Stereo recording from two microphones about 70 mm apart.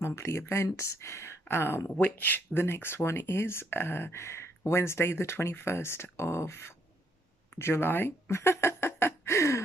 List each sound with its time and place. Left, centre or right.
0.0 s speech: left
2.0 s speech: left
7.5 s a sound: left